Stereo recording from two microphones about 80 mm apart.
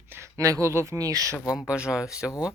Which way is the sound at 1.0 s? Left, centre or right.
Right.